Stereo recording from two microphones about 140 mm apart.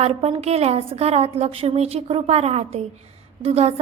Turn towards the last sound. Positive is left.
turn(degrees=-45)  # may be behind; listen again after turning